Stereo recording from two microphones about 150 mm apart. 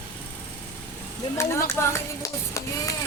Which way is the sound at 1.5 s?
20° left (ahead or behind).